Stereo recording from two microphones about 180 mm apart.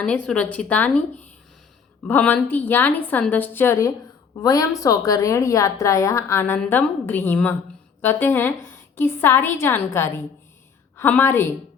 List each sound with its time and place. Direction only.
0.0 s a woman's voice: 5° left (ahead or behind)